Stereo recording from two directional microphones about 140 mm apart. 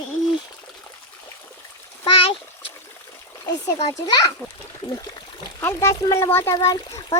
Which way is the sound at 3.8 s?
30° left (ahead or behind).